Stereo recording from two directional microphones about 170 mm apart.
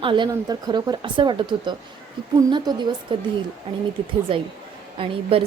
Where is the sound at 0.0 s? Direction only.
30° right (ahead or behind).